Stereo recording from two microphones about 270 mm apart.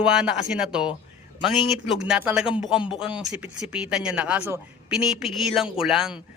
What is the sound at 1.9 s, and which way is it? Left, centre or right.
Speech, centre.